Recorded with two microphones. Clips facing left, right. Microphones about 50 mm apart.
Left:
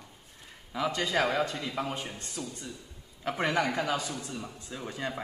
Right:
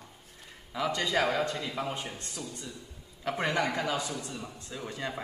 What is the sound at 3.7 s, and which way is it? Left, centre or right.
Speech, centre.